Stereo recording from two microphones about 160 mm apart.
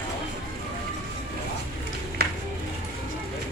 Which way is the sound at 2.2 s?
85° right.